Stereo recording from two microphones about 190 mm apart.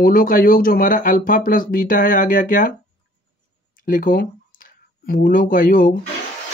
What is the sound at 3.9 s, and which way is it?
Speech, 45° left (ahead or behind).